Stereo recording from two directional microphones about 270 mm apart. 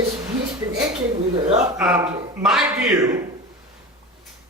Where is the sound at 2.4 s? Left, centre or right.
Centre.